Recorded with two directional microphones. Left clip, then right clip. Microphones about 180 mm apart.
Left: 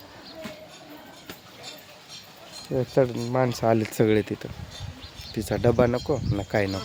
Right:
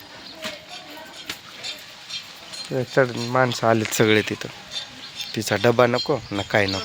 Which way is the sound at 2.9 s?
5° left (ahead or behind).